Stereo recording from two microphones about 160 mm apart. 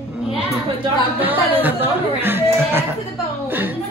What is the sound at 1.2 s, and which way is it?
Speech, 10° right (ahead or behind).